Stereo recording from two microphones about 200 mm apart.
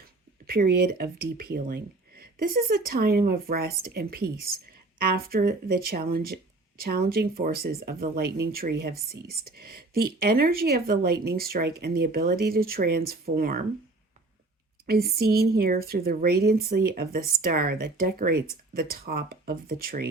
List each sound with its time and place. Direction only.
0.4 s speech: 50° right (ahead or behind)
14.8 s speech: 50° right (ahead or behind)